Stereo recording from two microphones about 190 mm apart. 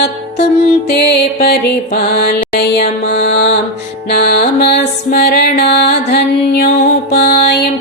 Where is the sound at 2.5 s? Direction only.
60° left (ahead or behind).